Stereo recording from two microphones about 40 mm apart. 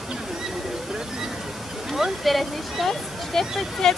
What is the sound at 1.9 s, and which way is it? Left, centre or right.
Speech, centre.